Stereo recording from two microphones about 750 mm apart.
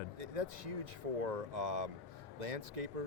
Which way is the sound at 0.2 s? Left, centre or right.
Right.